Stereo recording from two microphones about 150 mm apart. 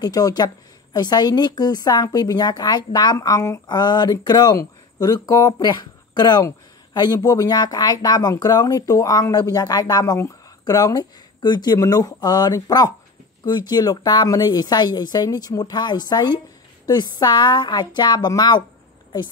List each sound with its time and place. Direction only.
0.0 s speech: 25° left (ahead or behind)